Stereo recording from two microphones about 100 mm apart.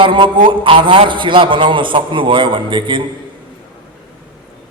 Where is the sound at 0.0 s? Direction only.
55° right (ahead or behind).